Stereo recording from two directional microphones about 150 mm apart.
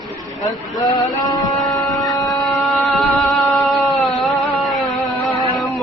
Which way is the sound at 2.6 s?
Centre (ahead or behind).